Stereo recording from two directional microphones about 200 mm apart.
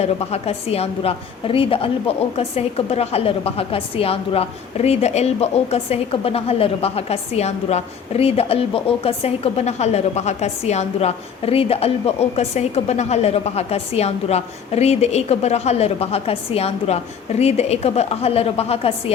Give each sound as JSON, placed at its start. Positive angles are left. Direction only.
{"t": 0.0, "sound": "a woman's voice", "side_deg": 30}